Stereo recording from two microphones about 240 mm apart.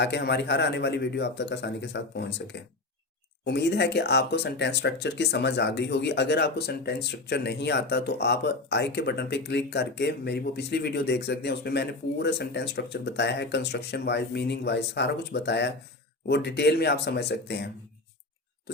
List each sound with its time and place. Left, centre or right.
0.0 s speech: left